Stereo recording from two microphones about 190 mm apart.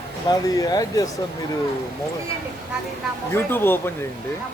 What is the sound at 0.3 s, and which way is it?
Speech, 20° left (ahead or behind).